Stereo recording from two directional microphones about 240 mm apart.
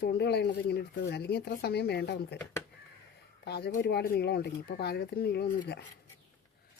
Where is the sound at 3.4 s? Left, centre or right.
Left.